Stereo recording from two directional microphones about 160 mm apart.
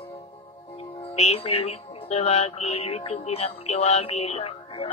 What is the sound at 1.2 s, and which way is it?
Music, 40° left (ahead or behind).